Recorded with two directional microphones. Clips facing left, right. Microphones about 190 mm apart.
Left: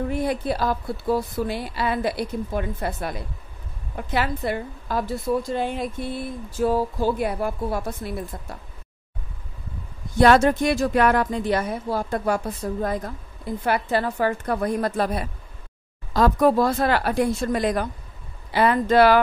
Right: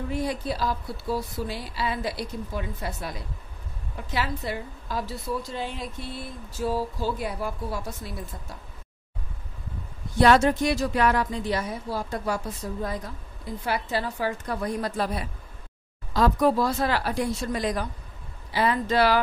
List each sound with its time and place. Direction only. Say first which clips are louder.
0.1 s a woman's voice: left 4 dB; 55° left (ahead or behind)
10.1 s a woman's voice: left 3 dB; 50° left (ahead or behind)